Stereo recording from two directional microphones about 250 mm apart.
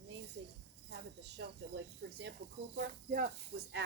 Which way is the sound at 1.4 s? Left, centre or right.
Right.